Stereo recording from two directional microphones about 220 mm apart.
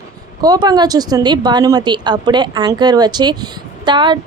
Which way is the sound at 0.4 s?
20° right (ahead or behind).